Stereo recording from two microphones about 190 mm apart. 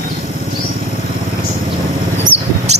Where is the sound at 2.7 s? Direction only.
35° right (ahead or behind).